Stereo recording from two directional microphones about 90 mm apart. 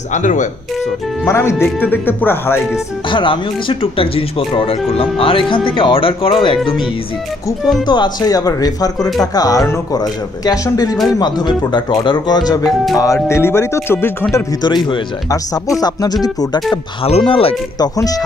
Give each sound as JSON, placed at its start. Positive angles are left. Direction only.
{"t": 1.2, "sound": "speech", "side_deg": 30}
{"t": 3.1, "sound": "speech", "side_deg": 70}
{"t": 7.8, "sound": "speech", "side_deg": 55}
{"t": 11.1, "sound": "speech", "side_deg": 50}
{"t": 12.9, "sound": "speech", "side_deg": 40}
{"t": 14.6, "sound": "speech", "side_deg": 55}
{"t": 15.2, "sound": "speech", "side_deg": 45}
{"t": 17.0, "sound": "speech", "side_deg": 85}
{"t": 17.7, "sound": "speech", "side_deg": 45}